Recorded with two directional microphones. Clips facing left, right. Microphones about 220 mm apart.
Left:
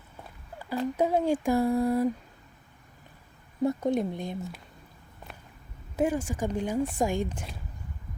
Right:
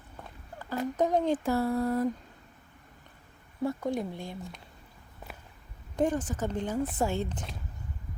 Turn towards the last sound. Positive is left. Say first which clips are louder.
# left 2 dB
turn(degrees=10)  # may be behind; listen again after turning